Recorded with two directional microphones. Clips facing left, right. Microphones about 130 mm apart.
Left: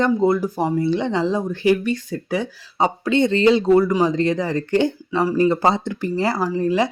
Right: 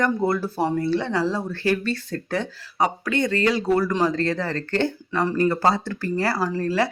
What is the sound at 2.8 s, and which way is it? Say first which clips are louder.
Speech: left 4 dB; 25° left (ahead or behind).